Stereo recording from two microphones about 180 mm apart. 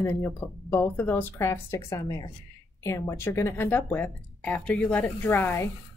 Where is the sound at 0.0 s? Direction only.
15° left (ahead or behind).